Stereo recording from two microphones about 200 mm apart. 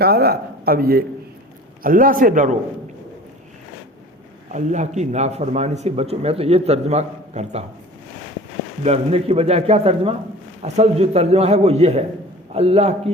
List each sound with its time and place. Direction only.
0.0 s speech: 50° right (ahead or behind)
4.5 s speech: 35° right (ahead or behind)
8.8 s speech: 30° right (ahead or behind)